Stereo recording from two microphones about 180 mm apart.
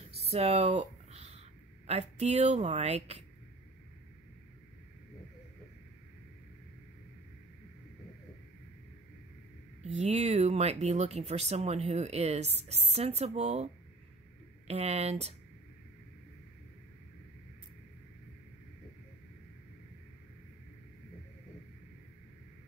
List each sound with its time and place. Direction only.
0.3 s a sound: 35° right (ahead or behind)
1.9 s speech: 35° right (ahead or behind)
9.8 s speech: 40° right (ahead or behind)
14.7 s speech: 35° right (ahead or behind)